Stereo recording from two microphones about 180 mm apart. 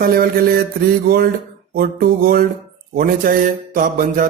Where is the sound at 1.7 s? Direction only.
55° right (ahead or behind).